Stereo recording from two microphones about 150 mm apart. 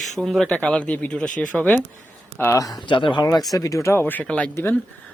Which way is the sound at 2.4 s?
20° left (ahead or behind).